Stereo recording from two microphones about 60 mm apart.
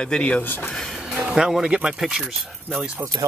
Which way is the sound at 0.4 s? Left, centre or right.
Left.